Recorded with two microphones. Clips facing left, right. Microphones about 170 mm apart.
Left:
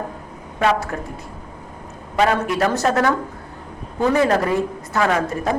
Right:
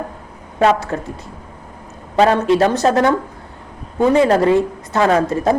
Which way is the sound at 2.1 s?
30° right (ahead or behind).